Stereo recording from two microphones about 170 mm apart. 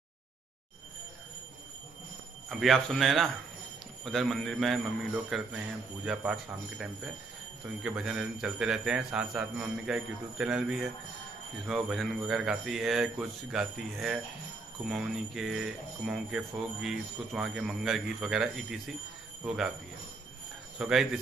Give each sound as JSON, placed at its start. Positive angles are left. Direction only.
{"t": 2.5, "sound": "speech", "side_deg": 0}
{"t": 20.8, "sound": "speech", "side_deg": -5}